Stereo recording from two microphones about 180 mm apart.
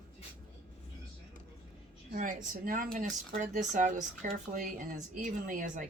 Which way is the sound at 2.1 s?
45° right (ahead or behind).